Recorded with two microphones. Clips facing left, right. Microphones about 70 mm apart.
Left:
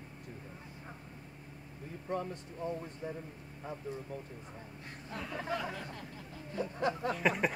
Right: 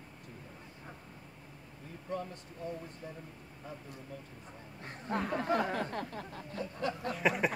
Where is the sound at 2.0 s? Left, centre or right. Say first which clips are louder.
Left 2 dB; left.